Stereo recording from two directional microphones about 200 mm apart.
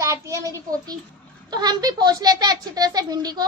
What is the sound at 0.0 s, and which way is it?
A child's voice, 15° right (ahead or behind).